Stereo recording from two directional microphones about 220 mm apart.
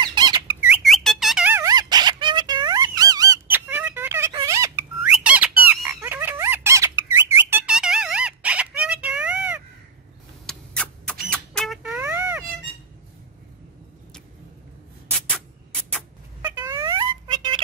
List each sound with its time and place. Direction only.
0.0 s squeak: 20° right (ahead or behind)
0.8 s squeak: centre (ahead or behind)
5.9 s squawk: 10° right (ahead or behind)
10.4 s rodents: 5° left (ahead or behind)
16.7 s a sound: 15° right (ahead or behind)